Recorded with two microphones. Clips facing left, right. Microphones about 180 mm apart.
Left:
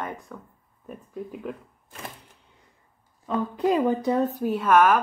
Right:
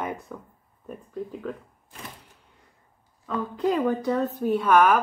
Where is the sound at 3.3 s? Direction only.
15° left (ahead or behind).